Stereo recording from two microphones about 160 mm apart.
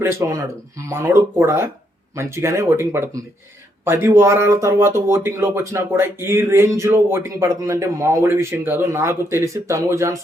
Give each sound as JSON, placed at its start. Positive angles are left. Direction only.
{"t": 0.0, "sound": "speech", "side_deg": -15}